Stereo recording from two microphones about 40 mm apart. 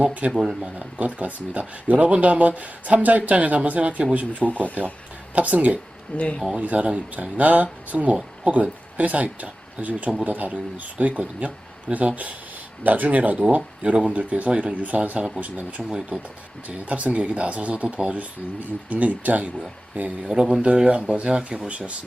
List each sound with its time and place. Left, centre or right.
0.0 s speech: right
0.3 s speech: centre
0.8 s speech: right
4.4 s speech: left
5.3 s speech: right
6.1 s speech: left
6.6 s speech: right
15.8 s speech: centre
16.6 s speech: right
20.2 s speech: right